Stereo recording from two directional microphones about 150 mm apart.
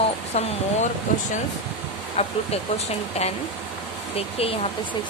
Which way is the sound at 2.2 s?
45° left (ahead or behind).